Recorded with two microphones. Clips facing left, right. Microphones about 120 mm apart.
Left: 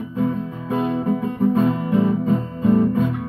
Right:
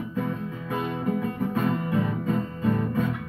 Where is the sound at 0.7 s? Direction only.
30° left (ahead or behind).